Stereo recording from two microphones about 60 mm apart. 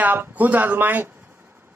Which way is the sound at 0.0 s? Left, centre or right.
Right.